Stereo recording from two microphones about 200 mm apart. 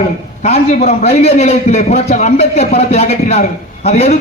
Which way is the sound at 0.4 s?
35° left (ahead or behind).